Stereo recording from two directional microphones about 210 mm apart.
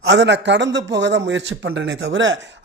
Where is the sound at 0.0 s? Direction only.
60° right (ahead or behind).